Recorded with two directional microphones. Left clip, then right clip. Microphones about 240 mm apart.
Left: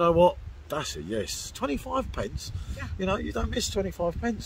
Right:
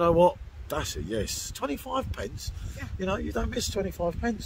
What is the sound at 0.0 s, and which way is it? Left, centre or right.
Speech, centre.